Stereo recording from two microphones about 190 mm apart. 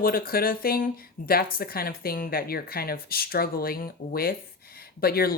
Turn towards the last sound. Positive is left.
turn(degrees=50)  # may be behind; listen again after turning